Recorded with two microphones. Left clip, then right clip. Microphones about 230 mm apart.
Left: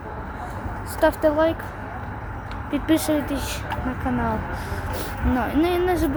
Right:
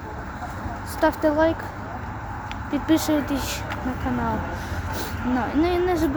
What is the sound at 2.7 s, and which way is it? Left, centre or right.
Speech, centre.